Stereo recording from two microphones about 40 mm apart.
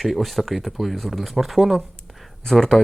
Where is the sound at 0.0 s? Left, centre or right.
Centre.